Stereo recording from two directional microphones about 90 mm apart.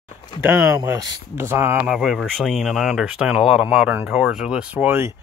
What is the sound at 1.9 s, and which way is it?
Speech, centre (ahead or behind).